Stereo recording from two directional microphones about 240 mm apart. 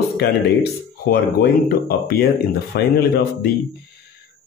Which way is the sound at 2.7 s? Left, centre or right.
Left.